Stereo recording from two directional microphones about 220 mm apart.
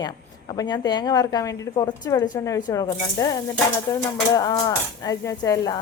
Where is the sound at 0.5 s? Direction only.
15° left (ahead or behind).